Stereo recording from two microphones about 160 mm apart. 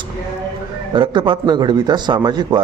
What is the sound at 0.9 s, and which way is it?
A man's voice, 30° right (ahead or behind).